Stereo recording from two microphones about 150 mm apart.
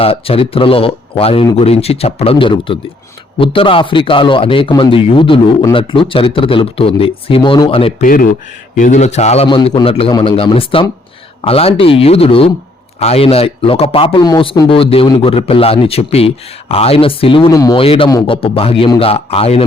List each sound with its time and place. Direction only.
0.0 s a man's voice: 40° left (ahead or behind)
8.0 s speech: 70° left (ahead or behind)
8.8 s a man's voice: 50° left (ahead or behind); by 17.5 s 35° left (ahead or behind)
17.5 s speech: 25° left (ahead or behind)
17.7 s a man's voice: 35° left (ahead or behind)